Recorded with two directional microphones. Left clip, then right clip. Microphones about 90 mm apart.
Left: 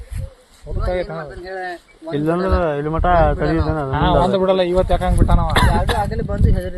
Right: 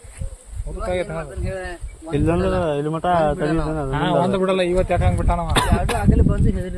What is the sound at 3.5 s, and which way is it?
Speech, 35° left (ahead or behind).